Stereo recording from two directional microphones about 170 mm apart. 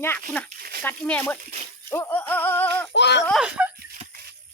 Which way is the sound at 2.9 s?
90° left.